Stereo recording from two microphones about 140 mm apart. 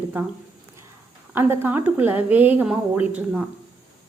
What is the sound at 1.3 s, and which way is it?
A woman's voice, 15° right (ahead or behind).